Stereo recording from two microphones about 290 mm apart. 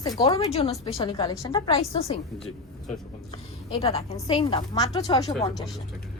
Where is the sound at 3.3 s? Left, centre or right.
Centre.